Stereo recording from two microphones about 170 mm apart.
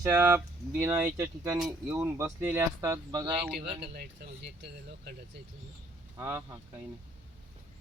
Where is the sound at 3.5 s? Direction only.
85° right.